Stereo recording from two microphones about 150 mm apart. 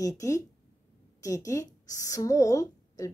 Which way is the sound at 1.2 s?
20° left (ahead or behind).